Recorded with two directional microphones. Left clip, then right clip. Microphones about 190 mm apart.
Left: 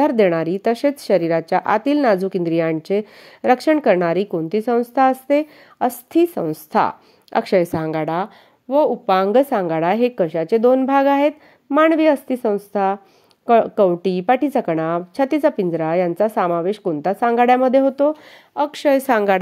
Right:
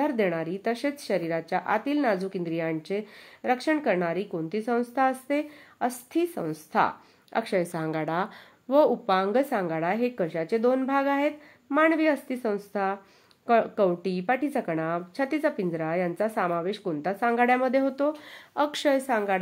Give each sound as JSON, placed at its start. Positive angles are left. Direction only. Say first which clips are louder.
{"t": 0.0, "sound": "a woman's voice", "louder": "left 11 dB", "side_deg": 45}
{"t": 8.6, "sound": "a woman's voice", "louder": "left 5 dB", "side_deg": 15}
{"t": 9.0, "sound": "a woman's voice", "louder": "left 9 dB", "side_deg": 35}
{"t": 18.9, "sound": "a woman's voice", "louder": "left 12 dB", "side_deg": 45}